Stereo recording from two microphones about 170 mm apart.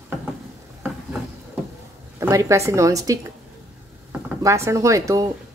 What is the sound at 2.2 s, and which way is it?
A woman's voice, 15° right (ahead or behind).